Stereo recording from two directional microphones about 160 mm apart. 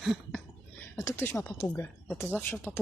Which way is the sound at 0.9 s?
15° left (ahead or behind).